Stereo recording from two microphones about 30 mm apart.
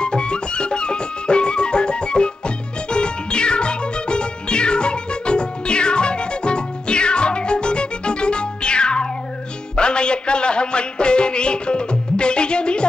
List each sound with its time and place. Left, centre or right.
0.0 s music: left